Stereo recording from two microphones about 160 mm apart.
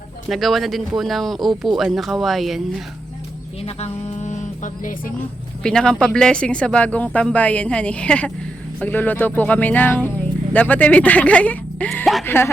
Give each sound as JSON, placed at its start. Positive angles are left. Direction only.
{"t": 0.3, "sound": "speech", "side_deg": 0}
{"t": 3.7, "sound": "speech", "side_deg": 40}
{"t": 5.6, "sound": "speech", "side_deg": 5}
{"t": 12.2, "sound": "speech", "side_deg": 15}